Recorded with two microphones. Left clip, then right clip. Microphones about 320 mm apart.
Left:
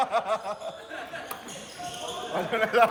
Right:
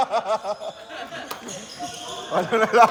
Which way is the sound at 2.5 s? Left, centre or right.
Right.